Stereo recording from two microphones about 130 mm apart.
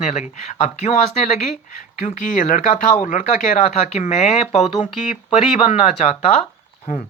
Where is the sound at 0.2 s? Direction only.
65° left (ahead or behind).